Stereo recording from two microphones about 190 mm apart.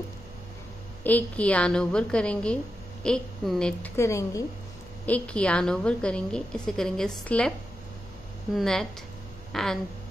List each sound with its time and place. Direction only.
1.0 s a woman's voice: 10° left (ahead or behind)
8.5 s a woman's voice: 5° left (ahead or behind)